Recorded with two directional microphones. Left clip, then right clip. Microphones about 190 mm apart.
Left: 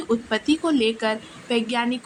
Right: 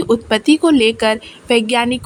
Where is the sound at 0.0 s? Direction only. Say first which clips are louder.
Right 9 dB; 50° right (ahead or behind).